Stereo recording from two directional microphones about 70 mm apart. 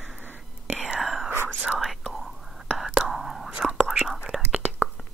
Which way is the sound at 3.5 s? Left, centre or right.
Centre.